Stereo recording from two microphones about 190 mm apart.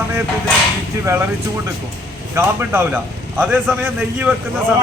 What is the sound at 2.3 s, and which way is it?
A man's voice, 10° right (ahead or behind).